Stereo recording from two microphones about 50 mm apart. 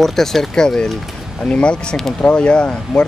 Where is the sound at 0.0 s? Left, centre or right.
Centre.